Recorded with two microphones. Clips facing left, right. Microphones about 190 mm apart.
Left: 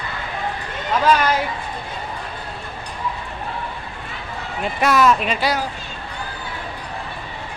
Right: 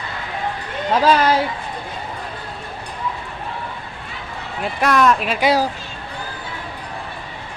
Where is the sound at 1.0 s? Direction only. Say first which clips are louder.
Right 1 dB; 30° right (ahead or behind).